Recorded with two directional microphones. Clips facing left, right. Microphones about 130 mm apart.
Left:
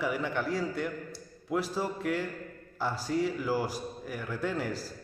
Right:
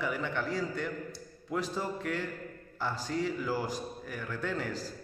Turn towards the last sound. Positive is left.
turn(degrees=10)  # may be behind; listen again after turning